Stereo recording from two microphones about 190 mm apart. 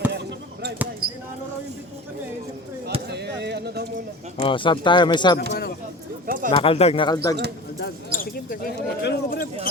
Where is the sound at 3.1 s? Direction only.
60° right (ahead or behind).